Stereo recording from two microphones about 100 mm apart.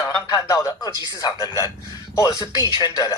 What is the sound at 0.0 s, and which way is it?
Speech, 35° left (ahead or behind).